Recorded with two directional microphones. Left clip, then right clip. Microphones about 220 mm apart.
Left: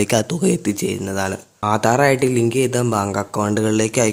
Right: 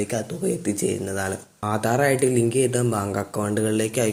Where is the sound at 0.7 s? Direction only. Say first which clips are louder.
Left 3 dB; 25° left (ahead or behind).